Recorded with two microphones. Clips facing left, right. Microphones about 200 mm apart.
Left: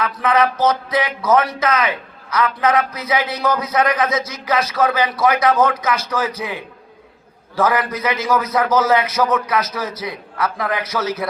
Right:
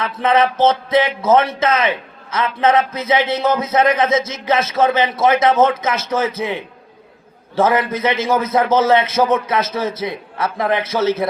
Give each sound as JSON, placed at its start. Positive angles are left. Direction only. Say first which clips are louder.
{"t": 0.0, "sound": "a man's voice", "louder": "right 1 dB", "side_deg": -25}